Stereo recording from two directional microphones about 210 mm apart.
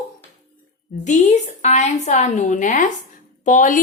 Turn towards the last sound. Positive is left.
turn(degrees=35)  # may be behind; listen again after turning